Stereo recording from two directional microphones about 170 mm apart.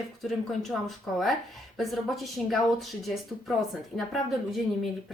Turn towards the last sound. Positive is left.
turn(degrees=0)  # may be behind; listen again after turning